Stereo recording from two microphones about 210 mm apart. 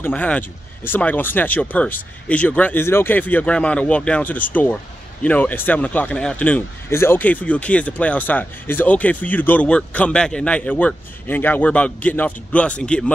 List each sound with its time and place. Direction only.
0.0 s speech: 5° left (ahead or behind)